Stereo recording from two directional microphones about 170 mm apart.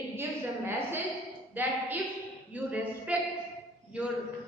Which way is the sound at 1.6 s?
10° right (ahead or behind).